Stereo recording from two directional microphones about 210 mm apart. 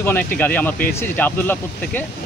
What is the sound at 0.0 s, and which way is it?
Speech, 10° left (ahead or behind).